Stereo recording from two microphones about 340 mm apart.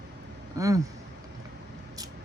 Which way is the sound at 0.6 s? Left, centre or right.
Centre.